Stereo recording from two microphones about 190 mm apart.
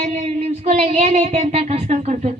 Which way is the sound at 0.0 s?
35° right (ahead or behind).